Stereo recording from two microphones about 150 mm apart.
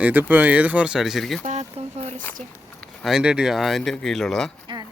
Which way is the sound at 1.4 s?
50° right (ahead or behind).